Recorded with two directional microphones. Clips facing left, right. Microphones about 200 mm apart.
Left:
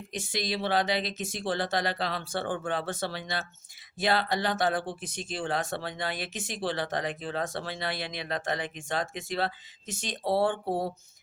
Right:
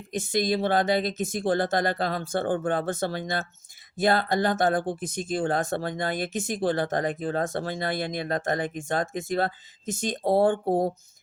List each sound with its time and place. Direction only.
0.1 s speech: 50° right (ahead or behind)